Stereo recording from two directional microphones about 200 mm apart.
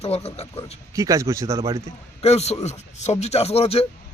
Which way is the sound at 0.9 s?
15° right (ahead or behind).